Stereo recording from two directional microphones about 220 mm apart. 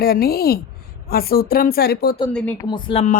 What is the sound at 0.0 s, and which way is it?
Speech, 45° left (ahead or behind).